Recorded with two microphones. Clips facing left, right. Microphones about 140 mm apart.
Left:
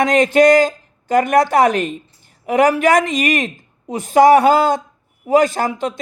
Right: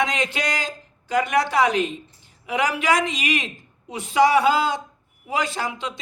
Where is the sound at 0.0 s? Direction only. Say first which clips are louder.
Left 13 dB; 50° left (ahead or behind).